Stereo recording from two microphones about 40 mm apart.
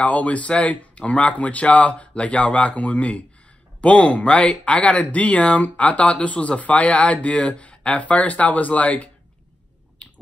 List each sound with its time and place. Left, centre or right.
0.0 s speech: left
10.0 s finger snapping: left